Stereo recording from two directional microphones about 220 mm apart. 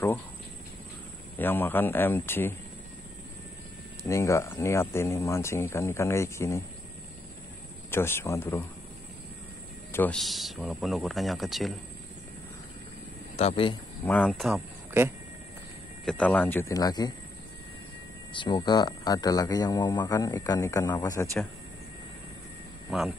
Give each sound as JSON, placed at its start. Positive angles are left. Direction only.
{"t": 1.4, "sound": "speech", "side_deg": 10}
{"t": 4.1, "sound": "speech", "side_deg": 15}
{"t": 7.9, "sound": "speech", "side_deg": 10}
{"t": 9.9, "sound": "speech", "side_deg": 5}
{"t": 13.4, "sound": "speech", "side_deg": 25}
{"t": 14.0, "sound": "speech", "side_deg": 5}
{"t": 16.1, "sound": "speech", "side_deg": 5}
{"t": 18.3, "sound": "speech", "side_deg": 20}
{"t": 22.8, "sound": "speech", "side_deg": 0}